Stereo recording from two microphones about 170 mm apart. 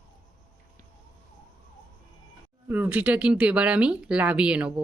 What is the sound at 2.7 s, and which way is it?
Speech, 10° right (ahead or behind).